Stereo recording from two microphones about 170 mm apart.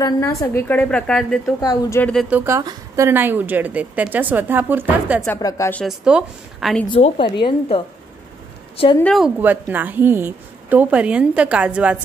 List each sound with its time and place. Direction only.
0.0 s a woman's voice: 20° left (ahead or behind)
1.4 s a woman's voice: 20° left (ahead or behind)
2.2 s a woman's voice: 10° right (ahead or behind)
5.4 s a woman's voice: 20° left (ahead or behind)
5.9 s a woman's voice: 5° right (ahead or behind)
6.9 s a woman's voice: 30° left (ahead or behind)
9.0 s a woman's voice: centre (ahead or behind)
9.4 s a woman's voice: 10° right (ahead or behind)